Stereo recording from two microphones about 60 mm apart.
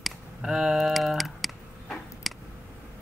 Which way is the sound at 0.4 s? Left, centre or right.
Centre.